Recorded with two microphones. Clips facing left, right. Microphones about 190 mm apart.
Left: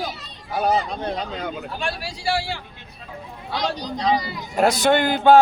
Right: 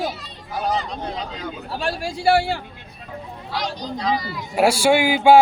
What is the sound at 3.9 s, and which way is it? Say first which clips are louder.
Speech: left 2 dB; 35° left (ahead or behind).